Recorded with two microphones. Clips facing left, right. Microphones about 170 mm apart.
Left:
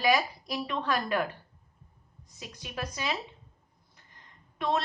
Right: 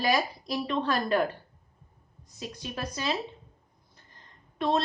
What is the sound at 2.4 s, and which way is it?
Speech, 35° right (ahead or behind).